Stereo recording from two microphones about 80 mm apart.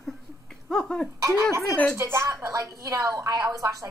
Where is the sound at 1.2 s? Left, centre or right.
Right.